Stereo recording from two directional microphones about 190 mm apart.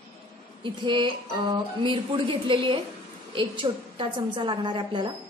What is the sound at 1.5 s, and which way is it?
A woman's voice, 25° right (ahead or behind).